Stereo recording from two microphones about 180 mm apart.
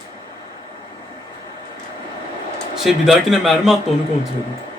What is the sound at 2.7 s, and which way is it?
A man's voice, centre (ahead or behind).